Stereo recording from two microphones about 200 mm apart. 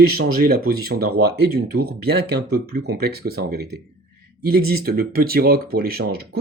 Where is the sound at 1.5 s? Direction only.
50° right (ahead or behind).